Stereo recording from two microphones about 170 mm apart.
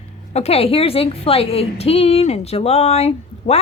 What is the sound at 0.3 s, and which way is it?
A woman's voice, 35° left (ahead or behind).